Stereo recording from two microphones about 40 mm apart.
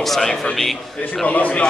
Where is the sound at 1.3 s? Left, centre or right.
Left.